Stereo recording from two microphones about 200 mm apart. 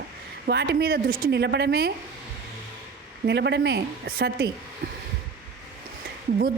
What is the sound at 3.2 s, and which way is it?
A woman's voice, 60° right (ahead or behind).